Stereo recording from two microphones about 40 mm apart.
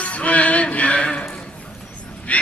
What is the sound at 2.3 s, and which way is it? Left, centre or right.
Dog, left.